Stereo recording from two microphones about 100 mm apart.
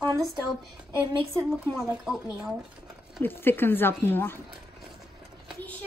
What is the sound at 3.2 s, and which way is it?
Speech, 20° left (ahead or behind).